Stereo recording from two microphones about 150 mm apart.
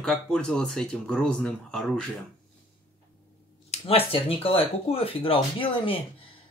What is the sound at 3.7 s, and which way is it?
Speech, 40° left (ahead or behind).